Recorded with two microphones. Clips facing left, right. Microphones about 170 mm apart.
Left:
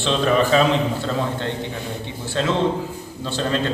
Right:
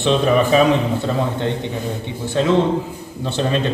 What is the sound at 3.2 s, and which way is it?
Speech, 20° right (ahead or behind).